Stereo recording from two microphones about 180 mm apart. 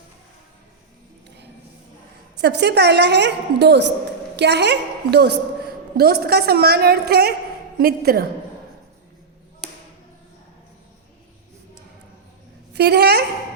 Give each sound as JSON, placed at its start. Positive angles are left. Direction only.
{"t": 2.4, "sound": "a woman's voice", "side_deg": -65}
{"t": 12.7, "sound": "a woman's voice", "side_deg": -65}